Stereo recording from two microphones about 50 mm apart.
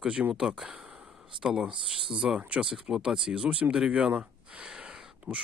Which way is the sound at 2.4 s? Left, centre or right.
Right.